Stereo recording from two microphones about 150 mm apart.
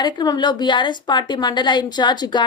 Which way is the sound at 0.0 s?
30° left (ahead or behind).